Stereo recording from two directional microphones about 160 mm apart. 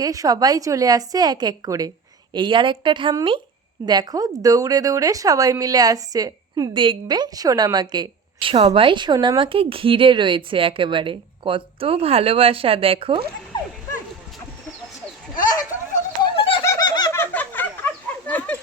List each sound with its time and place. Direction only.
0.0 s speech: 20° right (ahead or behind)
13.5 s dog: 25° left (ahead or behind)
16.2 s bird: 30° left (ahead or behind)
17.2 s a sound: 10° left (ahead or behind)